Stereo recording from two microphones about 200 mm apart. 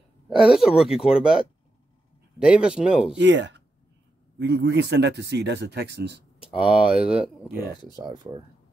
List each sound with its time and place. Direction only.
0.4 s speech: centre (ahead or behind)
3.2 s speech: 60° right (ahead or behind)
6.6 s speech: 5° right (ahead or behind)
7.9 s speech: 20° right (ahead or behind)